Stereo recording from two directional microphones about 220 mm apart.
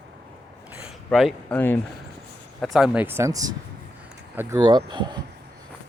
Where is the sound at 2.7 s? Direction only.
5° right (ahead or behind); by 5.1 s 20° right (ahead or behind).